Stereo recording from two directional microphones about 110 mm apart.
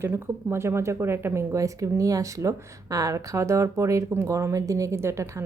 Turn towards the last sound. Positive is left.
turn(degrees=-25)  # may be behind; listen again after turning